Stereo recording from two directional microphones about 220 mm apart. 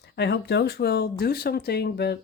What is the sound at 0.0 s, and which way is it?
Speech, 50° left (ahead or behind).